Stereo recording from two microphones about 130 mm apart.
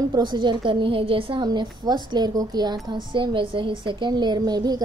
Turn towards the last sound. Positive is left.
turn(degrees=-30)  # may be behind; listen again after turning